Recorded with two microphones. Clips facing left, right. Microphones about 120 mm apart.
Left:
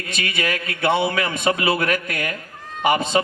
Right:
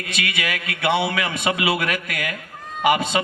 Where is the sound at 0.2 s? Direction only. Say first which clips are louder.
Left 2 dB; 45° left (ahead or behind).